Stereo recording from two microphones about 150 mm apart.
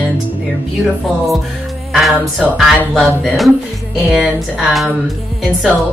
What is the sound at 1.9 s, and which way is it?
A woman's voice, centre (ahead or behind).